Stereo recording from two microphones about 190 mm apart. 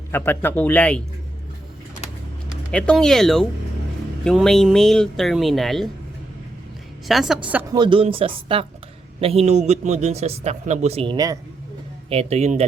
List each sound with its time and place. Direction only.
0.1 s a man's voice: 10° left (ahead or behind)
2.7 s speech: 5° left (ahead or behind)
7.1 s speech: centre (ahead or behind)
7.7 s a man's voice: 25° right (ahead or behind)
12.0 s a man's voice: 30° right (ahead or behind)